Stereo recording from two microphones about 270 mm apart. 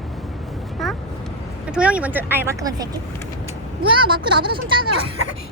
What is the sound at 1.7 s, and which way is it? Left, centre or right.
Speech, centre.